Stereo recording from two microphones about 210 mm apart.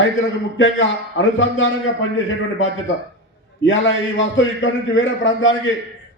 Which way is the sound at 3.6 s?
65° left (ahead or behind).